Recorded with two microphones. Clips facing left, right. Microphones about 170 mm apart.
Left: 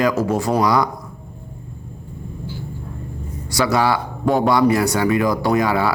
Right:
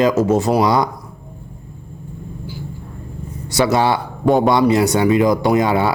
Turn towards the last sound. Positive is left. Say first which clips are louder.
# right 2 dB
turn(degrees=-25)  # may be behind; listen again after turning